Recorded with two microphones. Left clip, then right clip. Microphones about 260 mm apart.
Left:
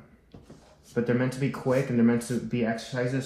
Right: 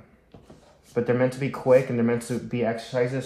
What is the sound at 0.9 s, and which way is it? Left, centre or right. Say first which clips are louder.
Speech: right 4 dB; right.